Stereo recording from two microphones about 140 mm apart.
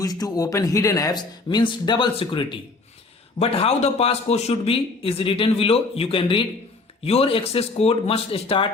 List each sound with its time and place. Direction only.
0.0 s a man's voice: 25° left (ahead or behind); by 8.6 s 40° left (ahead or behind)